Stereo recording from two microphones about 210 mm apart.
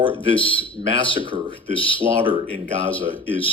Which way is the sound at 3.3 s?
25° left (ahead or behind).